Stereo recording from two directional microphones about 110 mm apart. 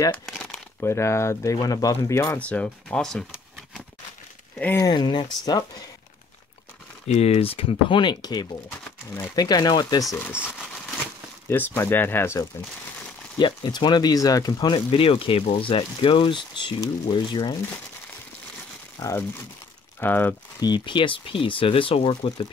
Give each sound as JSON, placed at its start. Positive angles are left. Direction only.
{"t": 0.7, "sound": "speech", "side_deg": 25}
{"t": 2.3, "sound": "speech", "side_deg": 10}
{"t": 4.9, "sound": "speech", "side_deg": 40}
{"t": 7.1, "sound": "speech", "side_deg": 70}
{"t": 10.1, "sound": "speech", "side_deg": 20}
{"t": 11.4, "sound": "speech", "side_deg": 20}
{"t": 13.4, "sound": "speech", "side_deg": 45}
{"t": 14.9, "sound": "speech", "side_deg": 55}
{"t": 18.9, "sound": "speech", "side_deg": 30}
{"t": 20.0, "sound": "speech", "side_deg": 15}
{"t": 20.6, "sound": "speech", "side_deg": 45}